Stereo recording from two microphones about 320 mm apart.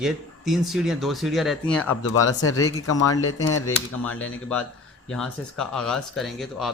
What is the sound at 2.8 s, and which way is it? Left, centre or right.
Speech, left.